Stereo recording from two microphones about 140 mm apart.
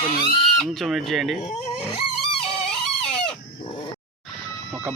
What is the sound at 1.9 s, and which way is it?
Guitar, 40° left (ahead or behind).